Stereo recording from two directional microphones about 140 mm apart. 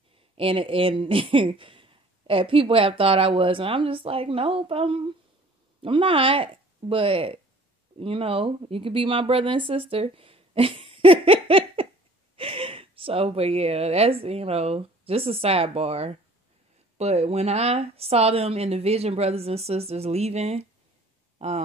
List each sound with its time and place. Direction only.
0.4 s speech: 40° right (ahead or behind)